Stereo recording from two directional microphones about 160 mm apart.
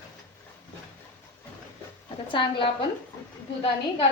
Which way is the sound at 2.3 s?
30° left (ahead or behind).